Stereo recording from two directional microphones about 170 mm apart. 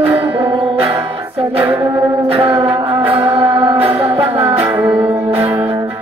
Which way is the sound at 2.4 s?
30° right (ahead or behind).